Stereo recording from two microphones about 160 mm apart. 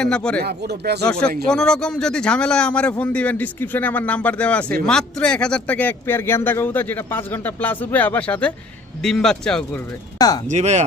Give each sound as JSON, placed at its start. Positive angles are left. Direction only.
{"t": 0.0, "sound": "speech", "side_deg": 5}
{"t": 0.4, "sound": "speech", "side_deg": -90}
{"t": 1.0, "sound": "speech", "side_deg": 5}
{"t": 10.2, "sound": "speech", "side_deg": 25}
{"t": 10.5, "sound": "speech", "side_deg": -45}